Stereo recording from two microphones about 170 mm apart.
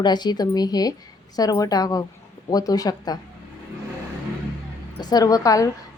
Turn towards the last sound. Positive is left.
turn(degrees=20)  # may be behind; listen again after turning